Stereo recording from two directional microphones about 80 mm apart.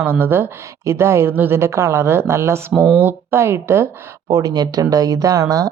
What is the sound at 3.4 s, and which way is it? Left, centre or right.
A woman's voice, right.